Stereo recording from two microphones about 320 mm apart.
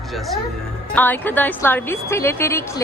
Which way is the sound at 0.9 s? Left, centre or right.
Centre.